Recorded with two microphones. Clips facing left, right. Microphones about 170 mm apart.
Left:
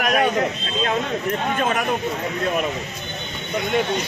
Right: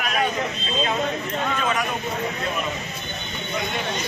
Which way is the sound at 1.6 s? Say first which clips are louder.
Left 3 dB; 50° left (ahead or behind).